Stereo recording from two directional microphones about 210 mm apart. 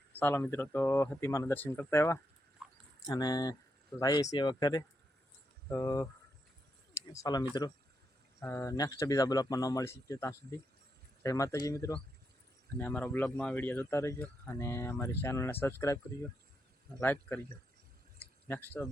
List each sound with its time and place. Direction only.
0.1 s speech: 10° left (ahead or behind)
2.6 s dog: centre (ahead or behind)
3.1 s speech: 20° left (ahead or behind)
7.1 s speech: 15° left (ahead or behind)
17.0 s speech: 10° left (ahead or behind)
18.2 s drip: 10° left (ahead or behind)